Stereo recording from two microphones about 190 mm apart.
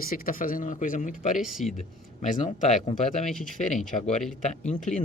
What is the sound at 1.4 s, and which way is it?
Speech, centre (ahead or behind).